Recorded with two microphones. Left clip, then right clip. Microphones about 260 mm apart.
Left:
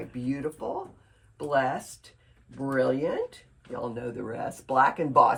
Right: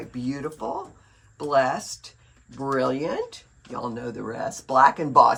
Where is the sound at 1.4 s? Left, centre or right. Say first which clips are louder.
Right 4 dB; right.